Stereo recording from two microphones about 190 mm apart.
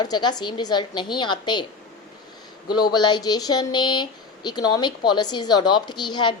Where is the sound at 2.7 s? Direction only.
20° left (ahead or behind).